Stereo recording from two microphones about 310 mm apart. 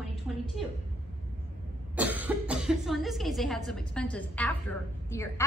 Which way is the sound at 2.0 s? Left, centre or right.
Centre.